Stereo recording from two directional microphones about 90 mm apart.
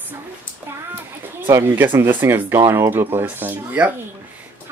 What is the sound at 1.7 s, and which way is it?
Speech, 25° right (ahead or behind).